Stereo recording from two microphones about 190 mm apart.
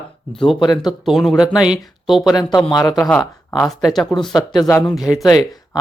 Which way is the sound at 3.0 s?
10° left (ahead or behind).